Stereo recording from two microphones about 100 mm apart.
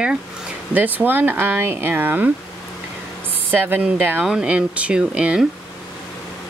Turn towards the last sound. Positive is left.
turn(degrees=-10)  # may be behind; listen again after turning